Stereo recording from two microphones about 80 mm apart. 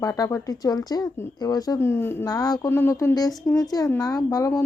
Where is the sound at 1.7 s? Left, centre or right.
Left.